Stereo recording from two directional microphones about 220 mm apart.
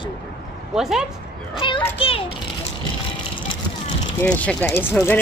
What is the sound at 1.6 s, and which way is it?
Speech, 20° left (ahead or behind).